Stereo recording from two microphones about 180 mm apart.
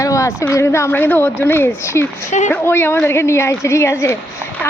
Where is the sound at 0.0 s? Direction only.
20° left (ahead or behind).